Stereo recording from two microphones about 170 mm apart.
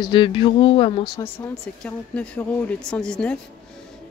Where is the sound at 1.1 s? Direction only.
15° left (ahead or behind).